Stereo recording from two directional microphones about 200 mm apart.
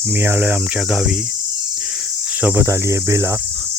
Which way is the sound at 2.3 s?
10° right (ahead or behind).